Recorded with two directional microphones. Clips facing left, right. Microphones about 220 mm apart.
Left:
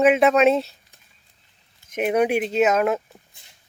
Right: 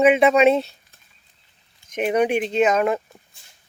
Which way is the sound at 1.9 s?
5° left (ahead or behind).